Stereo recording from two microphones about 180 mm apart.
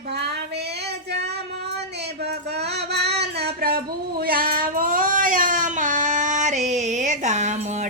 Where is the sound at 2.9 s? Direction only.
65° right (ahead or behind).